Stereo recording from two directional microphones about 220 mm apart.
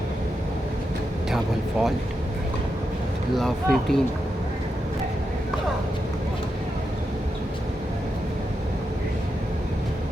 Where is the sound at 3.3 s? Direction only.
Centre (ahead or behind).